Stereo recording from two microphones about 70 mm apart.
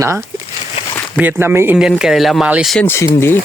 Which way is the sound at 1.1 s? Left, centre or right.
Right.